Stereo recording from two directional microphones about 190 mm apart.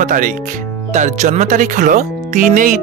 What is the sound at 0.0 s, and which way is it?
Speech, 45° right (ahead or behind).